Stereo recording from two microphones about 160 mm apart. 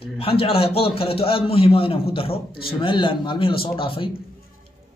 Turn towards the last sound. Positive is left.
turn(degrees=35)  # may be behind; listen again after turning